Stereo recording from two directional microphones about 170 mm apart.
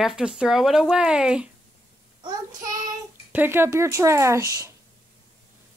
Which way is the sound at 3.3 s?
10° right (ahead or behind).